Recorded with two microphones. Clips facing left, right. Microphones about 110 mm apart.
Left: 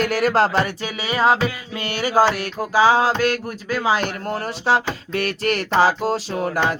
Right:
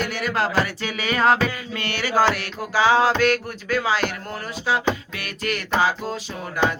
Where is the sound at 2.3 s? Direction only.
40° left (ahead or behind).